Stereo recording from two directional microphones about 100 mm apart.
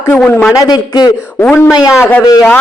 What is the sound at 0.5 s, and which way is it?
Speech, 40° left (ahead or behind).